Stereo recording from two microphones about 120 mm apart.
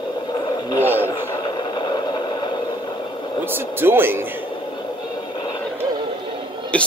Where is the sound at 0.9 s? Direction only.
20° left (ahead or behind).